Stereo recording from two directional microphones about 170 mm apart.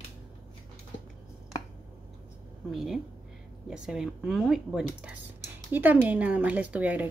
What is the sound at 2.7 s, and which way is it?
Speech, centre (ahead or behind).